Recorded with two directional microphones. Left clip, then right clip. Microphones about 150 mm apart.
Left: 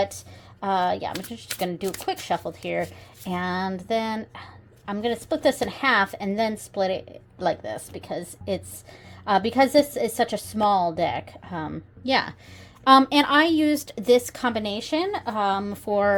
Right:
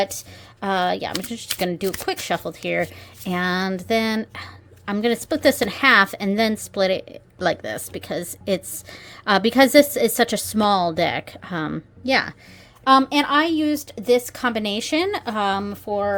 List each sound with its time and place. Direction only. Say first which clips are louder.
0.0 s a woman's voice: right 2 dB; 35° right (ahead or behind)
12.0 s a woman's voice: right 3 dB; 20° right (ahead or behind)
12.8 s speech: even; 5° right (ahead or behind)
14.6 s a woman's voice: right 4 dB; 30° right (ahead or behind)
15.9 s speech: left 2 dB; 10° left (ahead or behind)